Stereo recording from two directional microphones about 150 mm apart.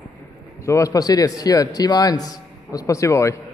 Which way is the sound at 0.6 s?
20° left (ahead or behind).